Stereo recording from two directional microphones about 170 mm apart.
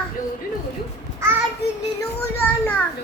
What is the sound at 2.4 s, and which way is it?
Children playing, 10° left (ahead or behind).